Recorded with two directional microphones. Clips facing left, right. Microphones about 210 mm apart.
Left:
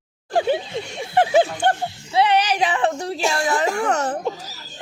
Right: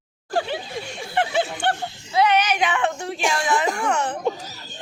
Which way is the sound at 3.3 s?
40° left (ahead or behind).